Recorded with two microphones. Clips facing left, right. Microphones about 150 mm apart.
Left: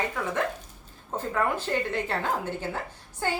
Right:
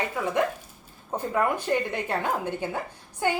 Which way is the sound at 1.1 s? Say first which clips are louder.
Right 2 dB; 15° right (ahead or behind).